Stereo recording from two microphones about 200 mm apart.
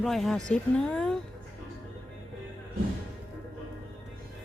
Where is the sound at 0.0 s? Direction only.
Centre (ahead or behind).